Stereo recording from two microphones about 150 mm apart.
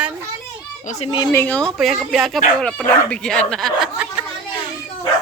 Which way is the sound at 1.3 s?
10° left (ahead or behind).